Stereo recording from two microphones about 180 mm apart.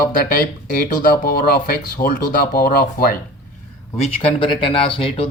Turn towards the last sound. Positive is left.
turn(degrees=30)  # may be behind; listen again after turning